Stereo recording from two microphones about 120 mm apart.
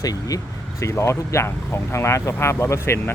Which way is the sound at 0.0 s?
30° left (ahead or behind).